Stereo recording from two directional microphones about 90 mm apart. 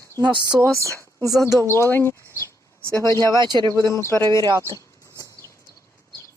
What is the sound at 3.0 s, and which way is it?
Speech, 35° left (ahead or behind).